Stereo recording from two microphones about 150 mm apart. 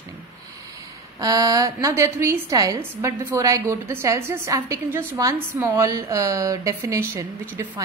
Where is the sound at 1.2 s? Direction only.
25° right (ahead or behind).